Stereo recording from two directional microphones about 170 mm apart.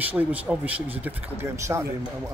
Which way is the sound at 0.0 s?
10° right (ahead or behind).